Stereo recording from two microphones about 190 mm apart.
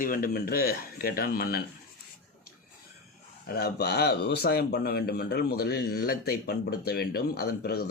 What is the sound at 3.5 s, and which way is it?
A man's voice, 55° left (ahead or behind).